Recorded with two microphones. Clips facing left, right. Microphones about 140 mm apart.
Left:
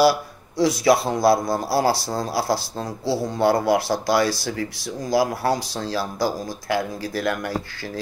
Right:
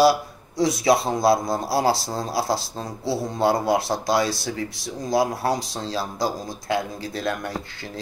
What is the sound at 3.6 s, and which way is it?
Speech, 25° right (ahead or behind).